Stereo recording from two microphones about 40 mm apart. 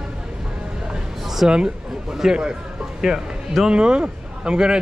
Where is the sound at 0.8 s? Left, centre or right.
Centre.